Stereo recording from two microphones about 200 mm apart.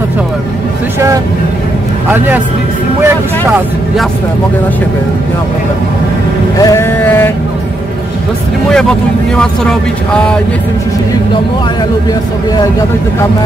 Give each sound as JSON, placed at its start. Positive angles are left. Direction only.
{"t": 0.9, "sound": "speech", "side_deg": -15}
{"t": 3.1, "sound": "speech", "side_deg": -5}
{"t": 6.6, "sound": "a sound", "side_deg": 15}
{"t": 9.4, "sound": "speech", "side_deg": 5}